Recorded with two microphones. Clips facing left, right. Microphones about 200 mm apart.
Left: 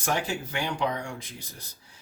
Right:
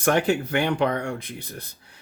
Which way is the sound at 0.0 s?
60° right (ahead or behind).